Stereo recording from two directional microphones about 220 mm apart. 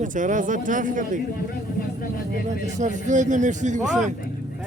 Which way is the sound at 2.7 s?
35° right (ahead or behind).